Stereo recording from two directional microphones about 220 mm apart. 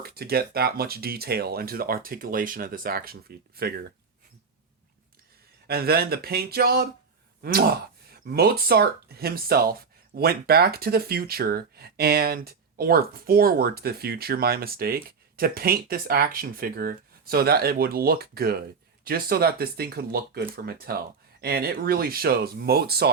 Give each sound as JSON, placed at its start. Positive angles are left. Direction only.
{"t": 0.0, "sound": "speech", "side_deg": -45}
{"t": 5.6, "sound": "speech", "side_deg": -45}